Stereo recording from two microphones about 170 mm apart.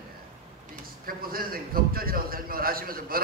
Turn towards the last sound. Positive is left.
turn(degrees=-60)  # may be behind; listen again after turning